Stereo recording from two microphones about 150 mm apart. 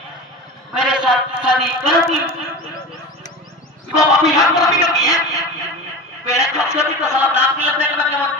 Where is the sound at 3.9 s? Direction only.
25° left (ahead or behind).